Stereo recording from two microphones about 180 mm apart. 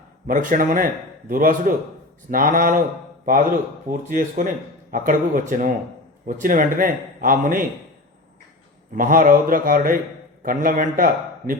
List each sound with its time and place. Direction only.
0.3 s speech: 45° right (ahead or behind)
3.8 s speech: 45° right (ahead or behind)
9.0 s speech: 50° right (ahead or behind)